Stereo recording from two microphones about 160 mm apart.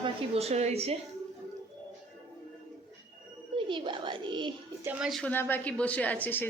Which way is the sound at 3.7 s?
30° right (ahead or behind).